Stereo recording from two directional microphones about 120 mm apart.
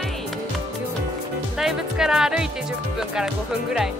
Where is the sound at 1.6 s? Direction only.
5° right (ahead or behind).